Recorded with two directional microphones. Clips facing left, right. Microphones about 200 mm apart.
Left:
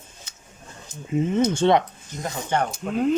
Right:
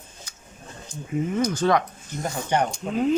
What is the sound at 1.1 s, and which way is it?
Speech, 25° left (ahead or behind).